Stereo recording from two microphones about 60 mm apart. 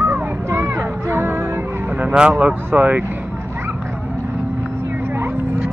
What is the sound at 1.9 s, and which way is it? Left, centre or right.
Vehicle, centre.